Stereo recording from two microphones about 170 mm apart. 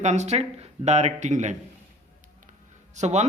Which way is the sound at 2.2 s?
50° right (ahead or behind).